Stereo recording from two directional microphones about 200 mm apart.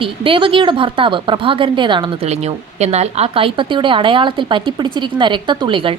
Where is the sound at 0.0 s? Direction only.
25° right (ahead or behind).